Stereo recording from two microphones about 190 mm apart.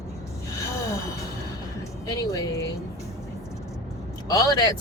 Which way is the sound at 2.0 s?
20° left (ahead or behind).